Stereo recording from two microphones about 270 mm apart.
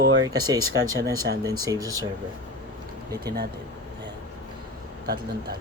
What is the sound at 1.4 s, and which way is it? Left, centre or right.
Speech, centre.